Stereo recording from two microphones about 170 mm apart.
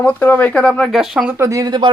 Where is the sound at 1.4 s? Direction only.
20° right (ahead or behind).